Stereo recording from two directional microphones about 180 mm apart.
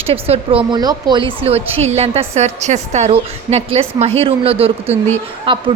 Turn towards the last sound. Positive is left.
turn(degrees=-30)  # may be behind; listen again after turning